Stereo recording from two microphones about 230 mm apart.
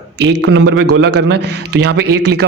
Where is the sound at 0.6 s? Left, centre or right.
Right.